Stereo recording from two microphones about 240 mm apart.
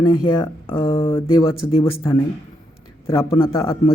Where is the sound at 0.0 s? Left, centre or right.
Left.